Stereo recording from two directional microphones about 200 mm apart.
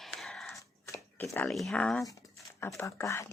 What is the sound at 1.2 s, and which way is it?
Speech, 15° left (ahead or behind).